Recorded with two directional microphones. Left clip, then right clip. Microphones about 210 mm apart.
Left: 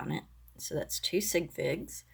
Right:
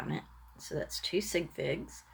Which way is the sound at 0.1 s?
25° left (ahead or behind).